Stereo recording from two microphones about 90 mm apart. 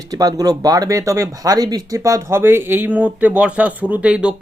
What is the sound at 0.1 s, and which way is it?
Speech, 45° right (ahead or behind).